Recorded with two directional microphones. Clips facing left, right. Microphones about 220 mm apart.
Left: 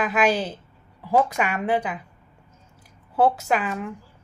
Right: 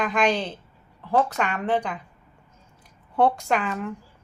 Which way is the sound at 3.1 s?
5° left (ahead or behind).